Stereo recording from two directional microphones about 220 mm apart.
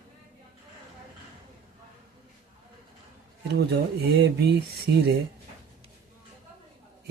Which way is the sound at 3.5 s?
50° right (ahead or behind).